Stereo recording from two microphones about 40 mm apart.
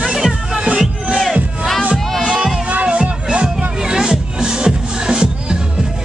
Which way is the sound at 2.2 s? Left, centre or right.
Centre.